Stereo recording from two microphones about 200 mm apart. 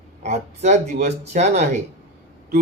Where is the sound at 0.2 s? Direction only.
35° right (ahead or behind).